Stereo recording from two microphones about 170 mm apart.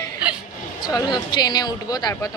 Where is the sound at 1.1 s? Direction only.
25° left (ahead or behind).